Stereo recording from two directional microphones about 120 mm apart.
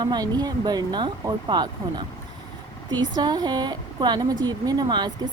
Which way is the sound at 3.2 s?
35° right (ahead or behind).